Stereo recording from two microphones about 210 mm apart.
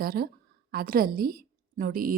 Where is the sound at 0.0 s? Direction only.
45° right (ahead or behind).